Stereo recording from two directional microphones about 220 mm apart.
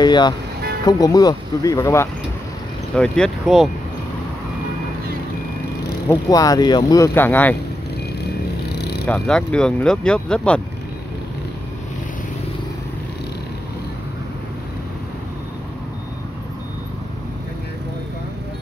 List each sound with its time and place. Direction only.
0.0 s speech: 20° left (ahead or behind)
3.0 s speech: centre (ahead or behind)
6.0 s speech: 15° left (ahead or behind)
9.0 s speech: 5° left (ahead or behind)